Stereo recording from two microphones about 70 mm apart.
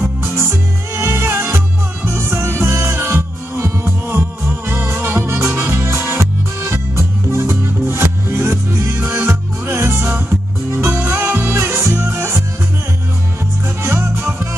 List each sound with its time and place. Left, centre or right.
0.4 s music: right
13.8 s music: right